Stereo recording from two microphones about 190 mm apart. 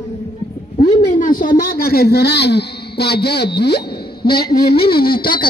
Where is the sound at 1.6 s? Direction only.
50° left (ahead or behind).